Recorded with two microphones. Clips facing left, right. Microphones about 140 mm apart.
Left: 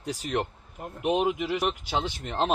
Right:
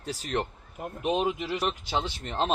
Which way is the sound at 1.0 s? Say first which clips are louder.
Left 2 dB; 10° left (ahead or behind).